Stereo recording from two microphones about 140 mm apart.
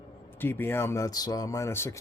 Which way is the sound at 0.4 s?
15° left (ahead or behind).